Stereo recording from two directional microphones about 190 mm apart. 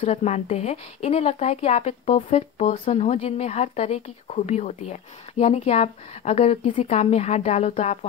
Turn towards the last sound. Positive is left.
turn(degrees=35)  # may be behind; listen again after turning